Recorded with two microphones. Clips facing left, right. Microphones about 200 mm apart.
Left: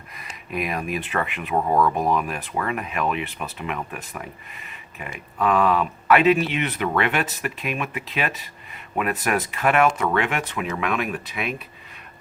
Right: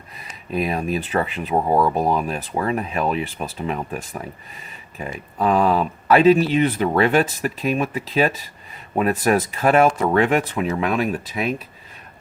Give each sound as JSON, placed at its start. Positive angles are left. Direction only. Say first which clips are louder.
{"t": 0.2, "sound": "speech", "louder": "right 4 dB", "side_deg": -30}